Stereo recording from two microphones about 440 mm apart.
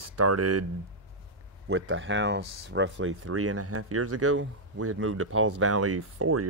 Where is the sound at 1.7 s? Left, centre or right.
Right.